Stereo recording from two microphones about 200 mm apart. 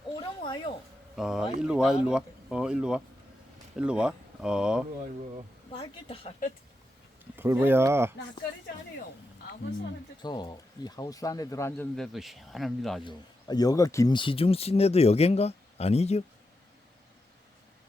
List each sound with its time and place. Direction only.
0.2 s a sound: 25° left (ahead or behind)
1.1 s speech: centre (ahead or behind)
5.7 s a woman's voice: 30° left (ahead or behind)
7.3 s speech: 10° right (ahead or behind)
10.2 s speech: 20° left (ahead or behind)
11.9 s speech: centre (ahead or behind)
13.1 s speech: 20° left (ahead or behind)